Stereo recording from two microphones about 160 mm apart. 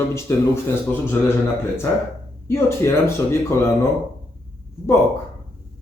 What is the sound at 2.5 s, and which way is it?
Speech, 15° left (ahead or behind).